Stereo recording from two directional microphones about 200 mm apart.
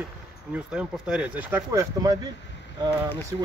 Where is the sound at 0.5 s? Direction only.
5° right (ahead or behind).